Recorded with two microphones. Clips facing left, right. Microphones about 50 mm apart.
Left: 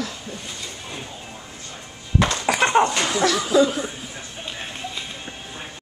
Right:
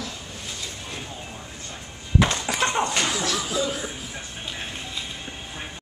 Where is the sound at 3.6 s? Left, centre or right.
Centre.